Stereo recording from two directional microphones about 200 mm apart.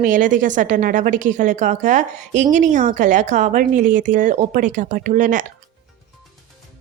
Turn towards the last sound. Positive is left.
turn(degrees=-40)  # may be behind; listen again after turning